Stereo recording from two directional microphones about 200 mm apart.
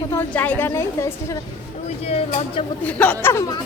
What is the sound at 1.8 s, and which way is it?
Speech, 30° left (ahead or behind).